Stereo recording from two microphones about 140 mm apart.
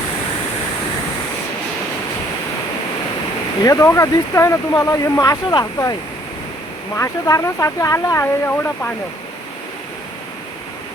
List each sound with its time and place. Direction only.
3.6 s speech: 25° left (ahead or behind)